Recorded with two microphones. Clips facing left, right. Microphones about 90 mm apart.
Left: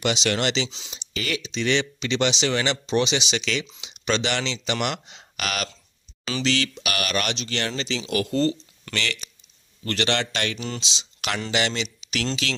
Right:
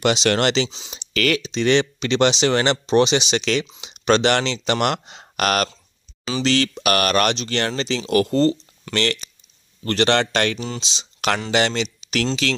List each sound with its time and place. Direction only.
0.0 s speech: 55° right (ahead or behind)
0.9 s speech: 75° right (ahead or behind)
1.4 s speech: 50° right (ahead or behind)